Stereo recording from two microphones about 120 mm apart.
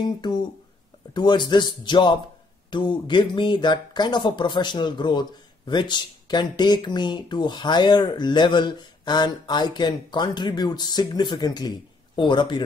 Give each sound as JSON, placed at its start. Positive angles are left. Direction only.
{"t": 0.0, "sound": "speech", "side_deg": 35}